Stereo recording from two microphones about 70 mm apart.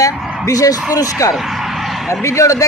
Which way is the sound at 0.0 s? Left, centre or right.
Left.